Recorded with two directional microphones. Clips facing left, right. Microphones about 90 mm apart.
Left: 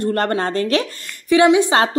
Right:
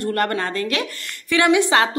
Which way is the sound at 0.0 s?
25° left (ahead or behind).